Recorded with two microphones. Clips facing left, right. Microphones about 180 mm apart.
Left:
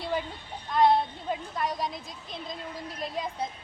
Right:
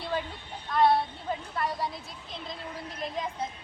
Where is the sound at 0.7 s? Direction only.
15° left (ahead or behind).